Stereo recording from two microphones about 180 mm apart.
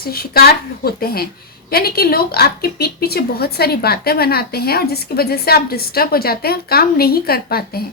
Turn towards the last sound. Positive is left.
turn(degrees=60)  # may be behind; listen again after turning